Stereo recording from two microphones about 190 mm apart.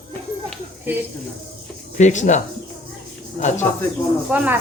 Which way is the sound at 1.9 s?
40° left (ahead or behind).